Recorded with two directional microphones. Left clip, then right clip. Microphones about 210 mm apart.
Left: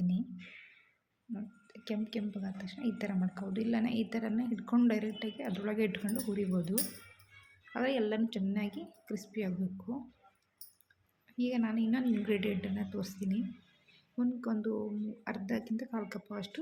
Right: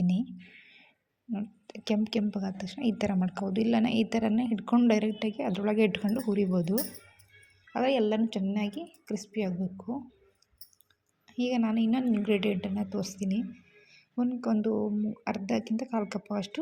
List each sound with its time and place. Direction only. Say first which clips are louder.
0.0 s a sound: right 6 dB; 30° right (ahead or behind)
1.3 s a woman's voice: right 7 dB; 30° right (ahead or behind)
11.3 s speech: right 5 dB; 25° right (ahead or behind)